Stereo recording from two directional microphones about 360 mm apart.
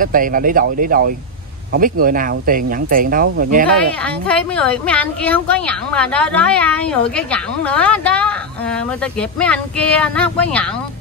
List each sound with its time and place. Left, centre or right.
0.0 s speech: right
4.0 s a woman's voice: centre